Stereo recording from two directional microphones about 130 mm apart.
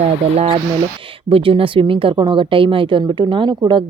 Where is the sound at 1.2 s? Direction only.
45° right (ahead or behind).